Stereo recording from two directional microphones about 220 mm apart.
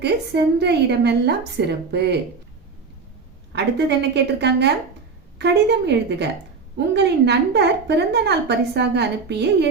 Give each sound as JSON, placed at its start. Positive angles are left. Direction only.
{"t": 0.0, "sound": "a woman's voice", "side_deg": -50}
{"t": 3.5, "sound": "a woman's voice", "side_deg": -50}